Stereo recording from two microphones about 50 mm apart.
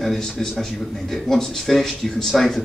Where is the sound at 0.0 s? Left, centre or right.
Centre.